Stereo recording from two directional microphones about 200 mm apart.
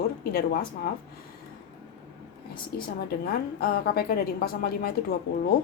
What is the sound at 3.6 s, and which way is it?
A woman's voice, 50° left (ahead or behind).